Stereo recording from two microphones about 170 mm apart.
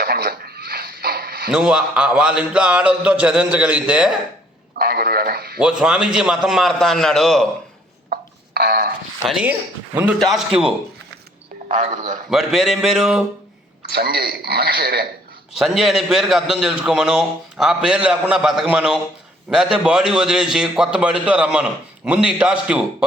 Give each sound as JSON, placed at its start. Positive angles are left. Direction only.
{"t": 0.0, "sound": "a sound", "side_deg": -65}
{"t": 1.5, "sound": "speech", "side_deg": -5}
{"t": 4.8, "sound": "speech", "side_deg": -65}
{"t": 5.5, "sound": "a man's voice", "side_deg": -5}
{"t": 8.1, "sound": "a sound", "side_deg": -65}
{"t": 9.2, "sound": "a man's voice", "side_deg": -5}
{"t": 11.7, "sound": "a man's voice", "side_deg": -50}
{"t": 12.3, "sound": "a man's voice", "side_deg": 0}
{"t": 13.8, "sound": "speech", "side_deg": -65}
{"t": 15.5, "sound": "a man's voice", "side_deg": 0}